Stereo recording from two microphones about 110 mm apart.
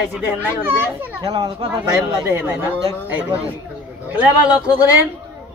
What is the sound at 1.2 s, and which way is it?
Speech, 40° right (ahead or behind).